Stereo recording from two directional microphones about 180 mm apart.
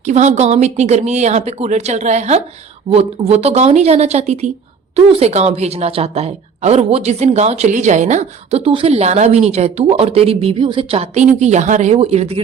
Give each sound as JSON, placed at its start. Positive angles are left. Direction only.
{"t": 0.0, "sound": "a woman's voice", "side_deg": -40}